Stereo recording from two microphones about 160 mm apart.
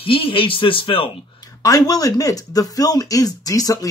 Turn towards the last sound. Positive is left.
turn(degrees=20)  # may be behind; listen again after turning